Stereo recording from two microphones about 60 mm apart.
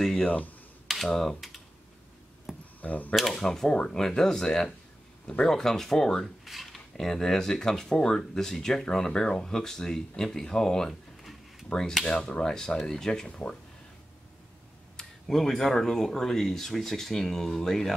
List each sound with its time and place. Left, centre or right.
0.0 s a sound: centre
0.8 s speech: centre
2.5 s a sound: centre
2.8 s speech: left
3.2 s speech: centre
15.0 s speech: centre